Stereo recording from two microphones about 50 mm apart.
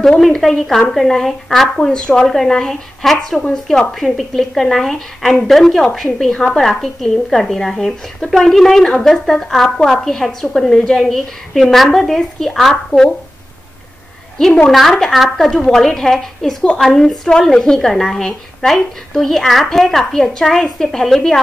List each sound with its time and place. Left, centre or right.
0.2 s a woman's voice: centre
2.2 s a woman's voice: centre
14.7 s a woman's voice: centre